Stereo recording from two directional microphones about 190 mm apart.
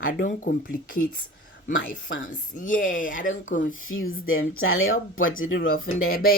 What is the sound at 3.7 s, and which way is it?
Speech, 90° left.